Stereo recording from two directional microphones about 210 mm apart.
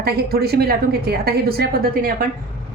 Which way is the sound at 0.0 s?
50° right (ahead or behind).